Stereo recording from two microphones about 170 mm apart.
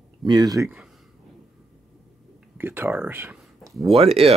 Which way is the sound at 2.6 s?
10° right (ahead or behind).